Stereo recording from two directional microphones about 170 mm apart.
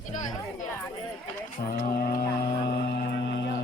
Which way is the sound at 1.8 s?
55° left (ahead or behind).